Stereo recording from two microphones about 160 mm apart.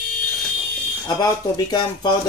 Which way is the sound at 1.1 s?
25° left (ahead or behind).